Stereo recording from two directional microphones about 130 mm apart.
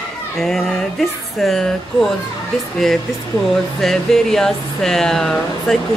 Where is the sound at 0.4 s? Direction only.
Centre (ahead or behind).